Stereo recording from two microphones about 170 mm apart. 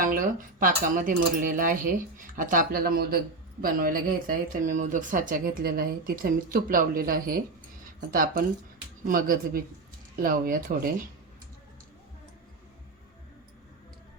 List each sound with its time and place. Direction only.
0.0 s speech: 55° right (ahead or behind)